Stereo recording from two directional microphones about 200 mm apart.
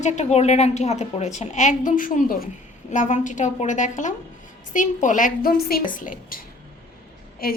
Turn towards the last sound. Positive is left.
turn(degrees=50)  # may be behind; listen again after turning